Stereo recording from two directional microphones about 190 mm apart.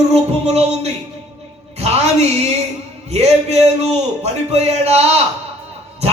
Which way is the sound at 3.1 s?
35° right (ahead or behind).